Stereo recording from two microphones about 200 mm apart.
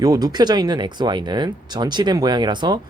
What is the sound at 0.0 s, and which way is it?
Speech, 20° right (ahead or behind).